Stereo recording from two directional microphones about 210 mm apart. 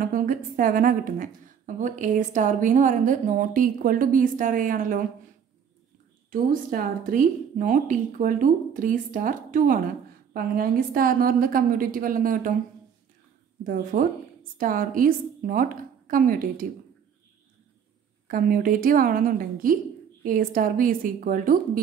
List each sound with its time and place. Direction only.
0.0 s a woman's voice: 40° right (ahead or behind)
6.3 s a woman's voice: 40° right (ahead or behind)
13.7 s a woman's voice: 40° right (ahead or behind)
18.2 s a woman's voice: 40° right (ahead or behind)